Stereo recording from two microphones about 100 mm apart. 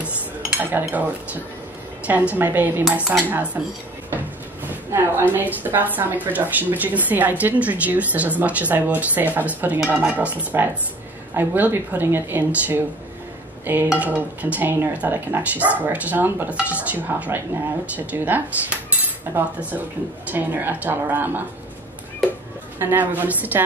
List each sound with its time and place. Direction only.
0.0 s dishes: 15° right (ahead or behind)
2.0 s a woman's voice: 15° right (ahead or behind)
4.6 s a woman's voice: 20° right (ahead or behind)
13.9 s a woman's voice: 15° right (ahead or behind)
22.8 s a woman's voice: 20° right (ahead or behind)